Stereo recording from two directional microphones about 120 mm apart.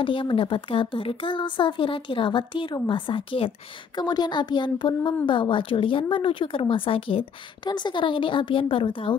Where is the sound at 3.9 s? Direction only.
35° left (ahead or behind).